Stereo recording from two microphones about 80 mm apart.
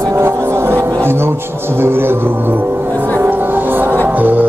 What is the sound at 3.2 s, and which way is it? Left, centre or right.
Music, right.